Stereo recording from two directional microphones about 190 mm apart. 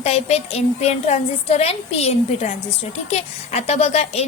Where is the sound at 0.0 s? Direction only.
35° left (ahead or behind).